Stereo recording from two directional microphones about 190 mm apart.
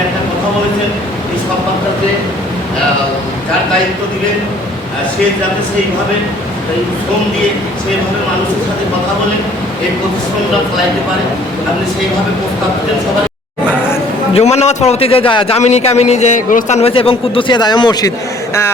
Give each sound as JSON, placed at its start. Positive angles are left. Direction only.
{"t": 14.3, "sound": "a man's voice", "side_deg": 35}